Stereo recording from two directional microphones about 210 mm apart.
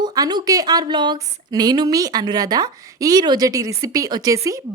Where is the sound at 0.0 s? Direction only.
20° right (ahead or behind).